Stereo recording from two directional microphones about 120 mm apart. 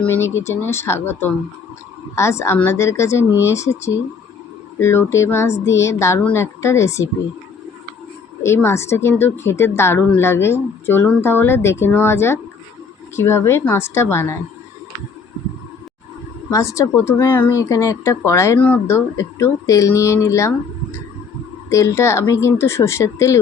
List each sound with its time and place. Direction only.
0.0 s a woman's voice: 20° left (ahead or behind)
8.4 s a woman's voice: 20° left (ahead or behind)
16.5 s a woman's voice: 25° left (ahead or behind)
21.7 s a woman's voice: 25° left (ahead or behind)